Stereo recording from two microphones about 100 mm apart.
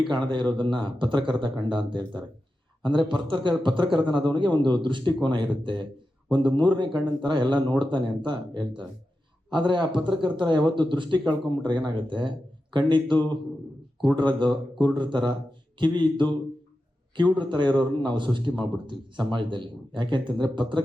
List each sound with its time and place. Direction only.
0.1 s a man's voice: 50° right (ahead or behind)